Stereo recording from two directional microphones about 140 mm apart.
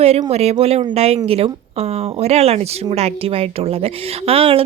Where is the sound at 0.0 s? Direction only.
45° right (ahead or behind).